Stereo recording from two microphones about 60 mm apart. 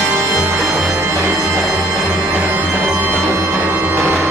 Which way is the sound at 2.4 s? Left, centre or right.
Right.